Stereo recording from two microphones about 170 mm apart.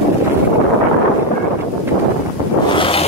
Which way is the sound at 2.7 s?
30° left (ahead or behind).